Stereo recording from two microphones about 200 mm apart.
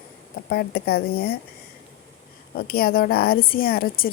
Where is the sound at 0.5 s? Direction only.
50° left (ahead or behind).